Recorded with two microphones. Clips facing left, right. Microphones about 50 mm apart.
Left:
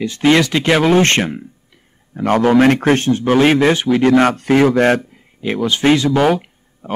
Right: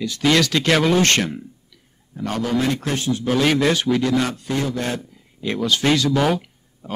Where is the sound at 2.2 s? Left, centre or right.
Left.